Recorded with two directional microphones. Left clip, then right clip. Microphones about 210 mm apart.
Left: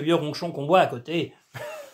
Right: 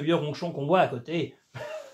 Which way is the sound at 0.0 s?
35° left (ahead or behind).